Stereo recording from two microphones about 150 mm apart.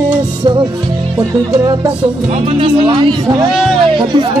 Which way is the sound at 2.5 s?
35° right (ahead or behind).